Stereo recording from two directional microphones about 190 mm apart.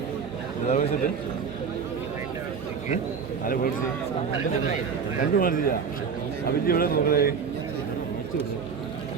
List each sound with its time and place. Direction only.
0.7 s a man's voice: 35° left (ahead or behind)
3.4 s a man's voice: 50° left (ahead or behind)
5.2 s a man's voice: 50° left (ahead or behind)